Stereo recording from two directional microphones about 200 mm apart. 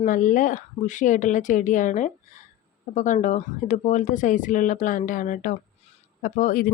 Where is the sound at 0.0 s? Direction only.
40° left (ahead or behind).